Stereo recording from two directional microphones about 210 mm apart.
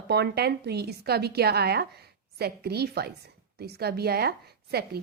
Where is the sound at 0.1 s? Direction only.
50° right (ahead or behind).